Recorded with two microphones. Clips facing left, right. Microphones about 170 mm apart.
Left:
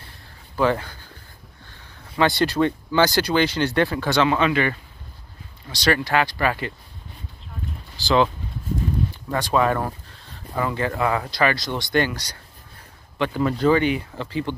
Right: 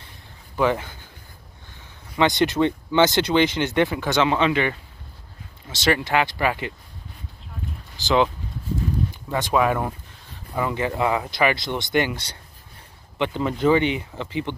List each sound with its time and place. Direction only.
0.6 s speech: 15° right (ahead or behind)
8.0 s speech: 15° right (ahead or behind)